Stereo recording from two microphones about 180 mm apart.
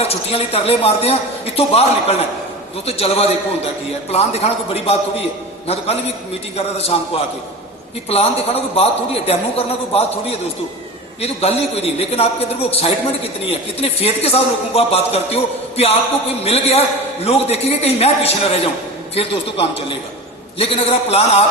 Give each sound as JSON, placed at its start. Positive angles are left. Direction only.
{"t": 0.0, "sound": "a man's voice", "side_deg": 35}
{"t": 6.9, "sound": "a man's voice", "side_deg": 35}
{"t": 8.1, "sound": "a man's voice", "side_deg": 35}